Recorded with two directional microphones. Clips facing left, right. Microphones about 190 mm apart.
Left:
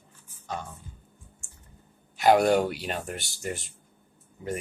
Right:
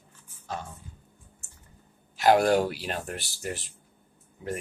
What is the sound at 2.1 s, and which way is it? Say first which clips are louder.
Speech: left 1 dB; centre (ahead or behind).